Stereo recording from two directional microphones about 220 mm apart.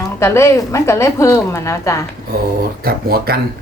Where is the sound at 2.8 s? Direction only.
45° right (ahead or behind).